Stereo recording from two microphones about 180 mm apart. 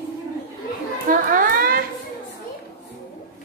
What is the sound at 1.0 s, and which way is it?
Chatter, 50° right (ahead or behind).